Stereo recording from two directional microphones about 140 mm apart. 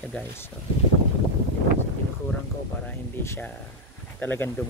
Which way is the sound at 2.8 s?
15° left (ahead or behind).